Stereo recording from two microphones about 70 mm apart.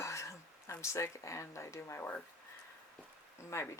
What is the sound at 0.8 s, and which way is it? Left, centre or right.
Speech, left.